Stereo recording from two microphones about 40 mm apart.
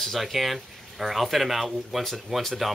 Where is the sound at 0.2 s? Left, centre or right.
Centre.